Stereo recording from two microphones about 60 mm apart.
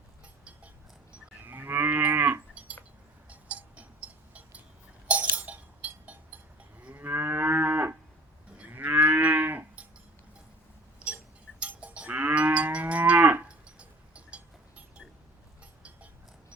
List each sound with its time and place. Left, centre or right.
1.5 s cattle: right
3.2 s cowbell: right
5.4 s music: right
6.9 s moo: right
11.6 s livestock: right